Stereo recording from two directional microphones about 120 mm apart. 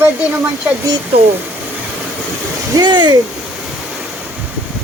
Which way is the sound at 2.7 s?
40° right (ahead or behind).